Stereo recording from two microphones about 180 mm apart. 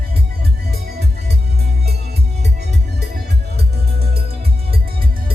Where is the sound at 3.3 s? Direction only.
65° right (ahead or behind).